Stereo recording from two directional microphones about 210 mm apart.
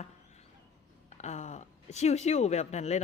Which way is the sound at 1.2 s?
35° left (ahead or behind).